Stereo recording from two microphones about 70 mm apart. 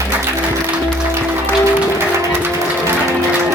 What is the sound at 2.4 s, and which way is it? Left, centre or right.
Music, right.